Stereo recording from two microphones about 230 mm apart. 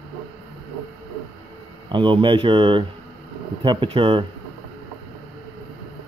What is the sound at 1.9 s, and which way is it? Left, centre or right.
Speech, right.